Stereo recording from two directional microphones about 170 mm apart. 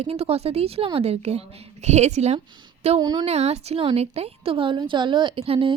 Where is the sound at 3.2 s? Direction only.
40° right (ahead or behind).